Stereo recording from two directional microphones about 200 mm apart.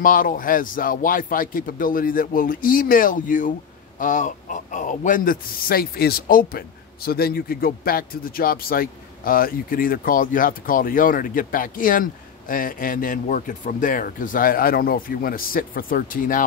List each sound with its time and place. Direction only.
0.0 s a man's voice: 45° left (ahead or behind)